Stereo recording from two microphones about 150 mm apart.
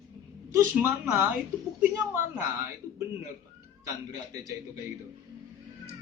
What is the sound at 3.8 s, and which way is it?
Speech, 25° right (ahead or behind).